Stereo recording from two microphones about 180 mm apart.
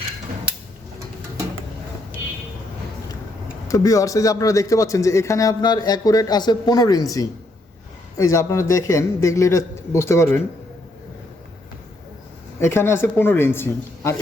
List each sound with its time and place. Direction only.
3.7 s a man's voice: 20° left (ahead or behind)
12.5 s a man's voice: 15° left (ahead or behind)